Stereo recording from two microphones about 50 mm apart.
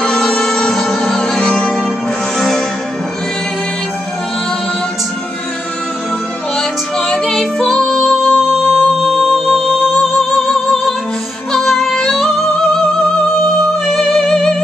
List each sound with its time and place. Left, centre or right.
0.0 s music: centre
7.0 s music: centre
13.8 s music: centre